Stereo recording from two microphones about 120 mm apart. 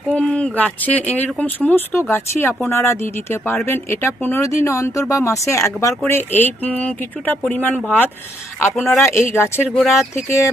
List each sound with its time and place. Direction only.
0.1 s speech: 10° left (ahead or behind)
9.6 s speech: centre (ahead or behind)